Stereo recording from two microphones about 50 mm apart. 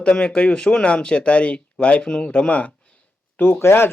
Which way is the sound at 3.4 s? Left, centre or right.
Left.